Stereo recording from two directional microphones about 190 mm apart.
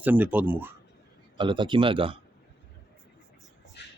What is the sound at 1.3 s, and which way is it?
Speech, 25° right (ahead or behind).